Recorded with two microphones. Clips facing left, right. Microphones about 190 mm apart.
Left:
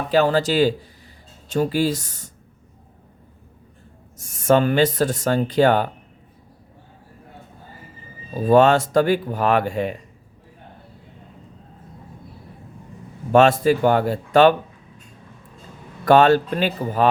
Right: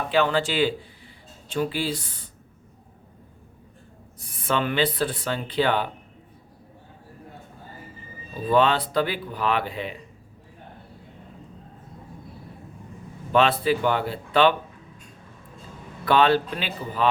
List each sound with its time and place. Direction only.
0.1 s speech: 40° left (ahead or behind)
4.2 s speech: 45° left (ahead or behind)
8.3 s speech: 45° left (ahead or behind)
13.3 s speech: 45° left (ahead or behind)
16.0 s speech: 45° left (ahead or behind)